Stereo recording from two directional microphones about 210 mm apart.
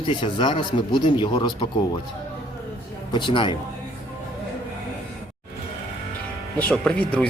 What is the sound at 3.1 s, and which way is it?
Speech, 20° left (ahead or behind).